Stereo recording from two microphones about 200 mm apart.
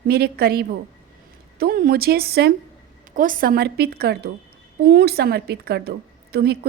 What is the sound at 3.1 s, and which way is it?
A woman's voice, 40° right (ahead or behind).